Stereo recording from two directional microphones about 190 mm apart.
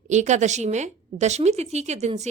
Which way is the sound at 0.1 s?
40° right (ahead or behind).